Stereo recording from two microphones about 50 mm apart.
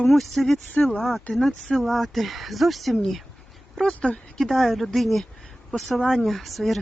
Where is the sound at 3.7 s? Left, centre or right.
Centre.